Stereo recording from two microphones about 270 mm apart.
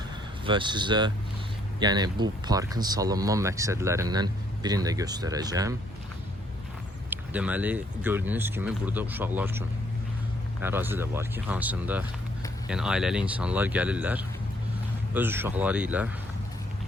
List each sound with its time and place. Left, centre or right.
0.4 s speech: centre
7.1 s speech: centre